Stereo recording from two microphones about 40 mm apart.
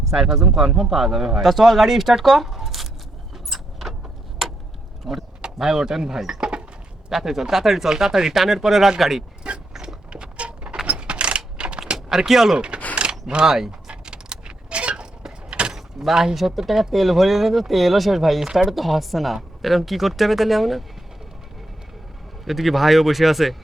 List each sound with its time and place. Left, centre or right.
0.0 s speech: centre
3.3 s vehicle: centre
5.1 s speech: centre
9.5 s mechanisms: right
9.8 s a sound: right
11.9 s speech: centre
12.5 s speech: right
13.8 s creak: right
15.4 s mechanisms: right
15.7 s vehicle: centre
16.1 s speech: centre
22.4 s speech: centre